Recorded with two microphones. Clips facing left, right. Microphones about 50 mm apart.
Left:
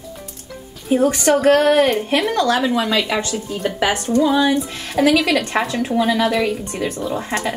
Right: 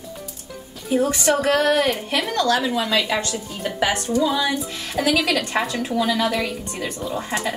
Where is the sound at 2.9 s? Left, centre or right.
Centre.